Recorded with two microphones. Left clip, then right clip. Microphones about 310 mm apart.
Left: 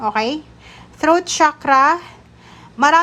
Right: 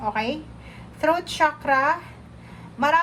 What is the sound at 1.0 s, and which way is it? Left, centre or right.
A woman's voice, left.